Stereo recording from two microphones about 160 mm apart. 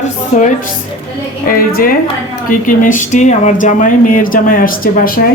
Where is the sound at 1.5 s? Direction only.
65° left (ahead or behind).